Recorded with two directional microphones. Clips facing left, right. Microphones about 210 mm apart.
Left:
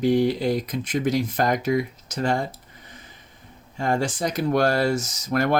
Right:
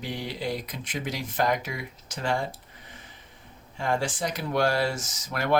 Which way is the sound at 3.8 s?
45° left (ahead or behind).